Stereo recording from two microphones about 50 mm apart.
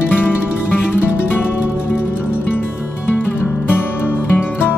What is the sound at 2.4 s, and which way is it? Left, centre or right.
Music, left.